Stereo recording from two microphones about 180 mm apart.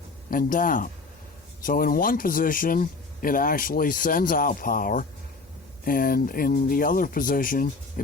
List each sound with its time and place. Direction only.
0.3 s speech: 50° left (ahead or behind)